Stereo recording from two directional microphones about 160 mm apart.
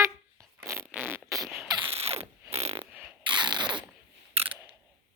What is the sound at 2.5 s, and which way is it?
Mechanisms, 40° right (ahead or behind).